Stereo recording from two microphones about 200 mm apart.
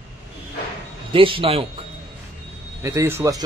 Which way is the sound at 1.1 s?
25° right (ahead or behind).